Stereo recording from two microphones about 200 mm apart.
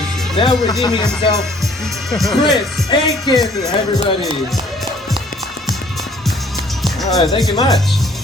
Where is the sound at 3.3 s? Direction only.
20° left (ahead or behind).